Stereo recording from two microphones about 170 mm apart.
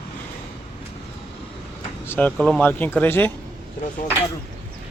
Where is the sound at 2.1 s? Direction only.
10° left (ahead or behind).